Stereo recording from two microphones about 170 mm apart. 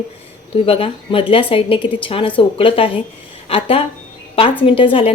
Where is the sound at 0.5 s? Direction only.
35° left (ahead or behind).